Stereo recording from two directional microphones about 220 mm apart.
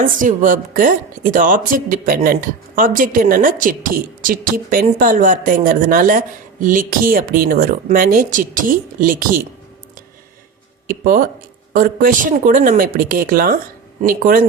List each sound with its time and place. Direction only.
0.0 s a woman's voice: 35° right (ahead or behind)
10.8 s a woman's voice: 40° right (ahead or behind)